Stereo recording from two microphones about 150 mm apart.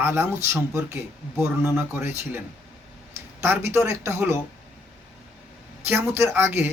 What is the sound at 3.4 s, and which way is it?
Speech, 15° right (ahead or behind).